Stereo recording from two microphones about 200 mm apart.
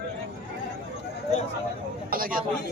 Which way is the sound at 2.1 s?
45° right (ahead or behind).